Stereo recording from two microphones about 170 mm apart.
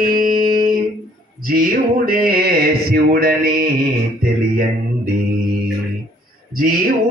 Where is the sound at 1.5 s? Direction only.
60° right (ahead or behind).